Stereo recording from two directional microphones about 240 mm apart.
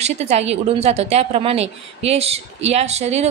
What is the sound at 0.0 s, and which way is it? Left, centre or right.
A woman's voice, right.